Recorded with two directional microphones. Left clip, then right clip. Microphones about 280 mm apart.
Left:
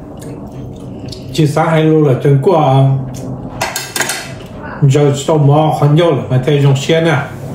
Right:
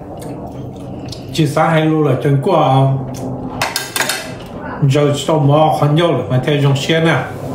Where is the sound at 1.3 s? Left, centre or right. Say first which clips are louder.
Left 1 dB; centre.